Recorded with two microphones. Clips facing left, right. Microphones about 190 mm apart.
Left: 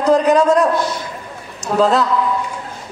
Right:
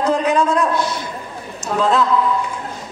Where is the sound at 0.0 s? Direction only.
40° left (ahead or behind).